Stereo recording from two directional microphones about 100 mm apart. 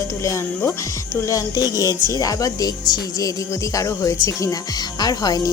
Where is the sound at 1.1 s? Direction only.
35° left (ahead or behind).